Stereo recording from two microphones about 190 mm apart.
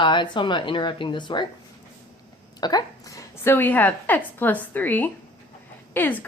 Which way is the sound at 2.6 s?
20° left (ahead or behind).